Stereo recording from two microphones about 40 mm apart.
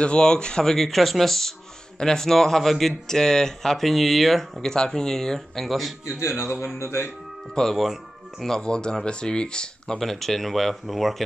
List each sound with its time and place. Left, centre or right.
0.0 s speech: left
0.7 s speech: centre
4.6 s speech: centre
6.4 s speech: left
7.7 s speech: centre
8.5 s speech: centre
9.9 s speech: centre